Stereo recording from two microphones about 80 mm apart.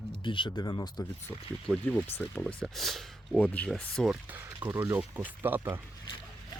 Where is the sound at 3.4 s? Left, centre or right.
Centre.